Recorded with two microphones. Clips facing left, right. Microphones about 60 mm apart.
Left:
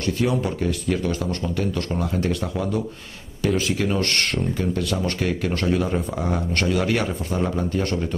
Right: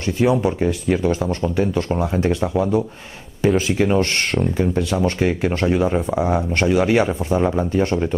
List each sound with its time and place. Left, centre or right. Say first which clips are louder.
0.0 s speech: right 5 dB; right
3.4 s speech: right 5 dB; centre
3.7 s speech: right 5 dB; right